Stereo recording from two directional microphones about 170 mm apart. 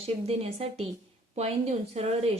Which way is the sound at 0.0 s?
35° right (ahead or behind).